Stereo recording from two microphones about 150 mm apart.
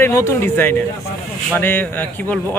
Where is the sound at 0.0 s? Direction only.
15° left (ahead or behind).